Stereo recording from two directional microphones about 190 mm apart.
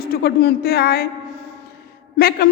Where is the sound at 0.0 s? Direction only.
55° left (ahead or behind).